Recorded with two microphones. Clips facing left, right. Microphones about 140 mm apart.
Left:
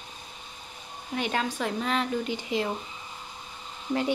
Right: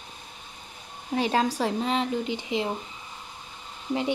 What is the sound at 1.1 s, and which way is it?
Speech, 30° right (ahead or behind).